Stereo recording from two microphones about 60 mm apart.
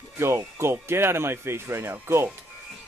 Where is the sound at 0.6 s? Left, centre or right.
Right.